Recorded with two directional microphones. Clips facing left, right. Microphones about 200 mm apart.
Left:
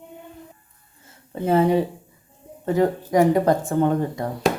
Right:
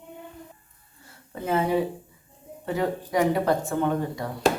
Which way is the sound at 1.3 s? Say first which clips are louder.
Left 6 dB; 30° left (ahead or behind).